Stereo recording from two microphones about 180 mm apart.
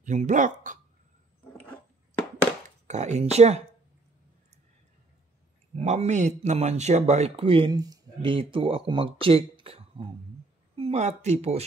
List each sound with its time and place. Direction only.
0.0 s speech: 40° right (ahead or behind)
2.9 s speech: 40° right (ahead or behind)
5.9 s speech: 40° right (ahead or behind)